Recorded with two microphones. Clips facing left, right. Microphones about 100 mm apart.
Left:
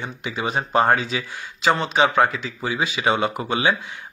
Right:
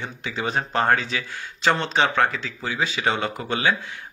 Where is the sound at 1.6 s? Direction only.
10° left (ahead or behind).